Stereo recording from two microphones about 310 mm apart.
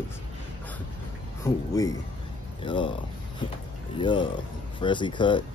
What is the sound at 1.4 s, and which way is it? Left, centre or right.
Speech, centre.